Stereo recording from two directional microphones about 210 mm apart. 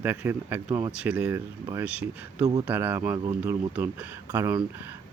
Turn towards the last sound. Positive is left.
turn(degrees=-15)  # may be behind; listen again after turning